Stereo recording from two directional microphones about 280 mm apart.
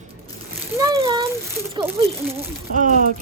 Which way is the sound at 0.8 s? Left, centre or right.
Centre.